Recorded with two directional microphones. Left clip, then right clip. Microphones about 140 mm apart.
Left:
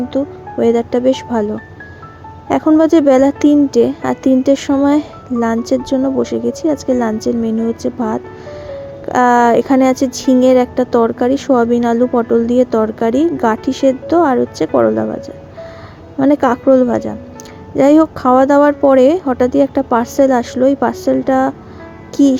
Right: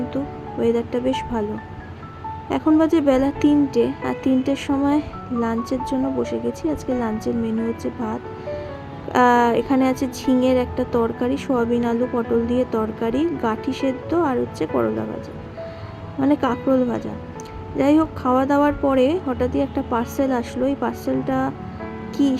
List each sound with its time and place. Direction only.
0.1 s speech: 30° left (ahead or behind)
2.7 s speech: 35° left (ahead or behind)
16.2 s speech: 35° left (ahead or behind)